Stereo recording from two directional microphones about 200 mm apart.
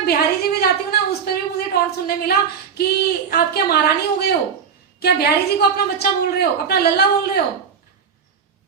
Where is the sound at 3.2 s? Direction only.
50° left (ahead or behind).